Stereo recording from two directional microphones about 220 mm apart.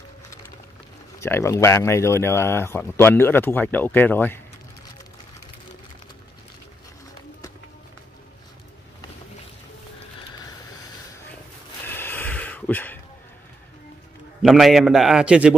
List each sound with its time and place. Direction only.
1.2 s speech: 10° left (ahead or behind)
11.8 s snort: 10° left (ahead or behind)
14.4 s a man's voice: centre (ahead or behind)